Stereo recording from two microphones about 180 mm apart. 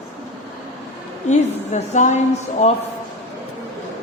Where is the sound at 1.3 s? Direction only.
40° left (ahead or behind).